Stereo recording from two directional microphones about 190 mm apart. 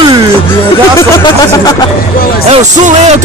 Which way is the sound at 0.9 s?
20° left (ahead or behind).